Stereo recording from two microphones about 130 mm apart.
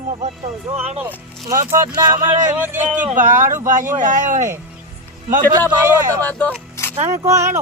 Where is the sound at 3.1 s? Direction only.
70° right (ahead or behind).